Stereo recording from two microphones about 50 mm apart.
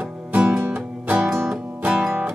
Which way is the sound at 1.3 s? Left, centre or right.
Centre.